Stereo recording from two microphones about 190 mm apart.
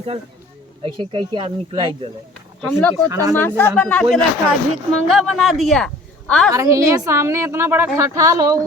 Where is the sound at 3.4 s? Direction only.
10° left (ahead or behind).